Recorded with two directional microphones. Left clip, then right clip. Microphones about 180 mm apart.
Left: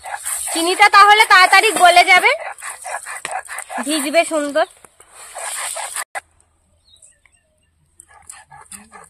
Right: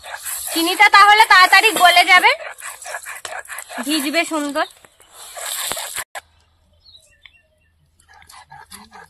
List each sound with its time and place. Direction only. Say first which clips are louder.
0.5 s a woman's voice: even; 60° left (ahead or behind)
2.4 s a sound: left 3 dB; 45° left (ahead or behind)
3.9 s a woman's voice: left 3 dB; 60° left (ahead or behind)
8.5 s dog: right 1 dB; 10° left (ahead or behind)